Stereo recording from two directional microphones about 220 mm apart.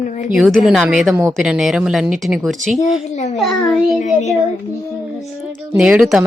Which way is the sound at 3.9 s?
35° left (ahead or behind).